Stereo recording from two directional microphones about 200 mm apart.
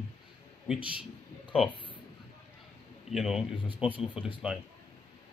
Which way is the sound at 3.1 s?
Centre (ahead or behind).